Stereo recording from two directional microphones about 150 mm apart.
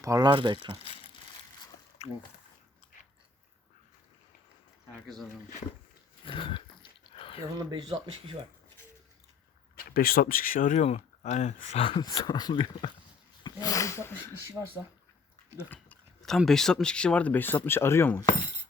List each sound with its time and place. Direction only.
0.0 s speech: 25° right (ahead or behind)
0.8 s crumpling: 40° left (ahead or behind)
2.0 s speech: 45° left (ahead or behind)
5.0 s speech: centre (ahead or behind)
6.2 s a sound: 35° left (ahead or behind)
7.7 s speech: 30° right (ahead or behind)
9.9 s speech: 75° left (ahead or behind); by 11.8 s 50° left (ahead or behind)
11.8 s speech: 35° left (ahead or behind)
15.5 s speech: 10° left (ahead or behind)